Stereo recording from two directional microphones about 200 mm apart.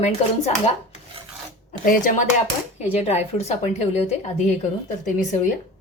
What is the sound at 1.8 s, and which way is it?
A woman's voice, 40° left (ahead or behind).